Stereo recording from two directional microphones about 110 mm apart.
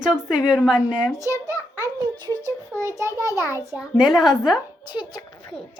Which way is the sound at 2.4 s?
25° right (ahead or behind).